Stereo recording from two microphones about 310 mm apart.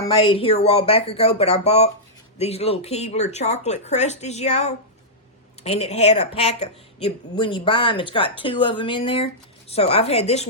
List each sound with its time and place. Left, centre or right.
0.1 s speech: centre